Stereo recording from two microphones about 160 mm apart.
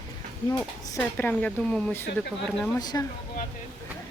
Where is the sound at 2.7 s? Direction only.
25° left (ahead or behind).